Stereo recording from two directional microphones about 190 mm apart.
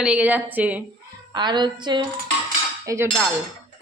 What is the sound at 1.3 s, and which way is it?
A woman's voice, 25° right (ahead or behind).